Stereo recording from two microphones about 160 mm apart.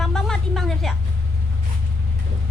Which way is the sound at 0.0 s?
5° left (ahead or behind).